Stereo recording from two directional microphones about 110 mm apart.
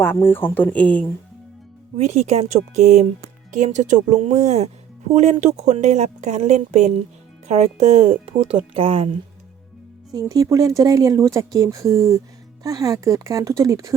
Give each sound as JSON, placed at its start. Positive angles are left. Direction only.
{"t": 0.0, "sound": "speech", "side_deg": 20}
{"t": 2.0, "sound": "a woman's voice", "side_deg": -80}
{"t": 10.1, "sound": "speech", "side_deg": -35}